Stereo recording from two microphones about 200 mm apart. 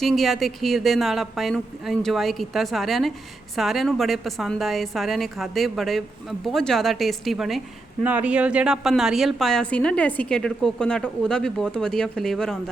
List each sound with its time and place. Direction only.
0.0 s a woman's voice: centre (ahead or behind)